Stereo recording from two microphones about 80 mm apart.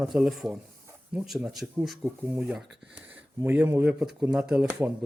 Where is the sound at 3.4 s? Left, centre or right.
Right.